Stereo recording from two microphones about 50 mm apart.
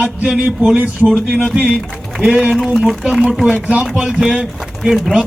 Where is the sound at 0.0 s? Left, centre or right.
Centre.